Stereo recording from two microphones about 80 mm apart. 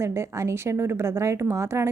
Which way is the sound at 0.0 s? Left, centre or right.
Right.